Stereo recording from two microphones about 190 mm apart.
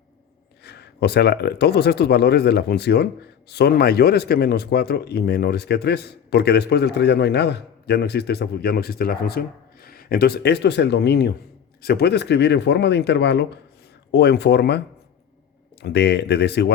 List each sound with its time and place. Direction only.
0.6 s speech: 60° left (ahead or behind)
15.8 s speech: 60° left (ahead or behind)